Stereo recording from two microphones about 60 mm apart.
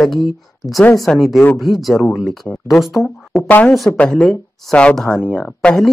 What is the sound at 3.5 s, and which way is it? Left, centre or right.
Speech, left.